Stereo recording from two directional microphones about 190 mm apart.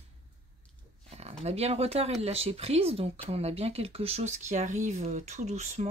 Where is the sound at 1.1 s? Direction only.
35° right (ahead or behind).